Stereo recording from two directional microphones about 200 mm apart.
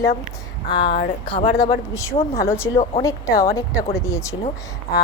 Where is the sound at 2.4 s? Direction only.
15° left (ahead or behind).